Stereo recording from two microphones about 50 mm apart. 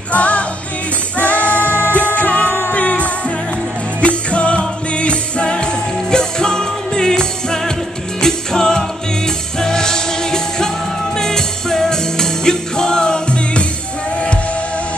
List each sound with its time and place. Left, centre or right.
0.1 s music: left